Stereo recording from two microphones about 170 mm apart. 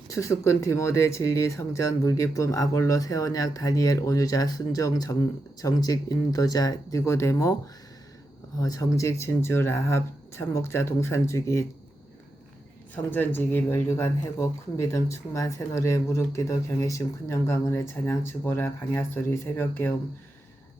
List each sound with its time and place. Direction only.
0.1 s speech: 15° left (ahead or behind)
8.5 s speech: 20° left (ahead or behind)
12.9 s speech: 10° left (ahead or behind)